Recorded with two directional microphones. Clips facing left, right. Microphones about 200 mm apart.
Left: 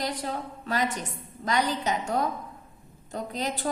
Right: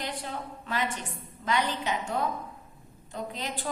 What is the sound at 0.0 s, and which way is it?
A woman's voice, 40° left (ahead or behind).